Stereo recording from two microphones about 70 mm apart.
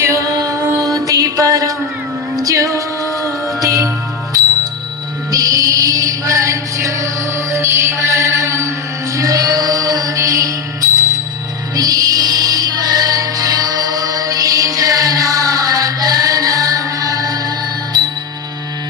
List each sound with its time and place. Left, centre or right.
0.0 s music: right
0.3 s music: right
5.3 s music: right
17.9 s music: right